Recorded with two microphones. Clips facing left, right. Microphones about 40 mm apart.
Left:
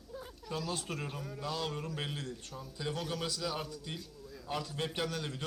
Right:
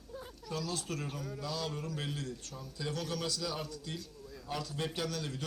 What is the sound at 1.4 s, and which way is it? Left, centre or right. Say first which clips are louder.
A man's voice: left 2 dB; left.